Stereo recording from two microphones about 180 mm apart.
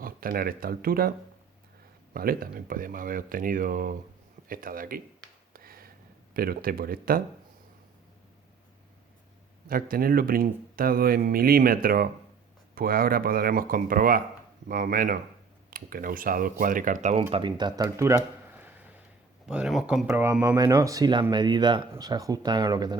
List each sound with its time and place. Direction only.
0.0 s speech: 55° right (ahead or behind)
2.1 s speech: 55° right (ahead or behind)
5.5 s a sound: 55° right (ahead or behind)
6.3 s speech: 55° right (ahead or behind)
9.6 s speech: 55° right (ahead or behind); by 18.2 s 15° right (ahead or behind)
18.5 s a sound: 10° right (ahead or behind)
19.5 s speech: 5° right (ahead or behind)
20.1 s speech: 10° right (ahead or behind)